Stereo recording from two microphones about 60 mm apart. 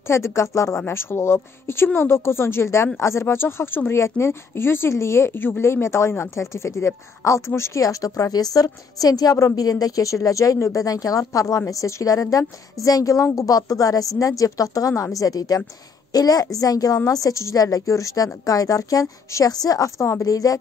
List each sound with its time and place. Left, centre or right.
0.1 s a woman's voice: left
3.9 s a woman's voice: left
7.8 s a woman's voice: left
14.2 s a woman's voice: left
15.1 s a woman's voice: left
17.1 s a woman's voice: left